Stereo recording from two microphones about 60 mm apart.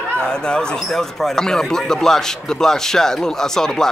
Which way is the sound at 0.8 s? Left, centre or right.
Centre.